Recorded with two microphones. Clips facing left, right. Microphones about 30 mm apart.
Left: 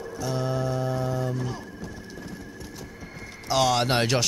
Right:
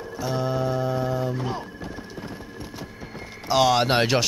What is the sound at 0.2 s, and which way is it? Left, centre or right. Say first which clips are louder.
Music: right 3 dB; centre.